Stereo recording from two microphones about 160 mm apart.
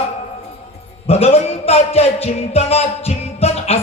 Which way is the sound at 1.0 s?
40° left (ahead or behind).